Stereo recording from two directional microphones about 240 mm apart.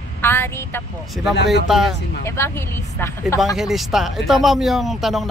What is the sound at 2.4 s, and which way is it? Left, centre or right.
A woman's voice, centre.